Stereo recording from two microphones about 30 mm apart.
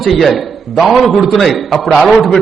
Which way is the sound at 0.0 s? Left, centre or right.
Centre.